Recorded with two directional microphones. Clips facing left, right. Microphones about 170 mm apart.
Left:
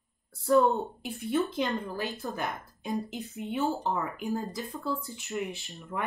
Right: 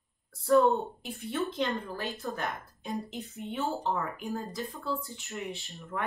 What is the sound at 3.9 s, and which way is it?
Speech, 20° left (ahead or behind).